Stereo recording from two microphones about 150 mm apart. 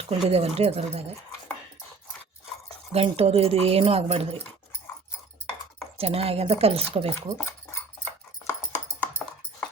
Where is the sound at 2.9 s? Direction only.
40° right (ahead or behind).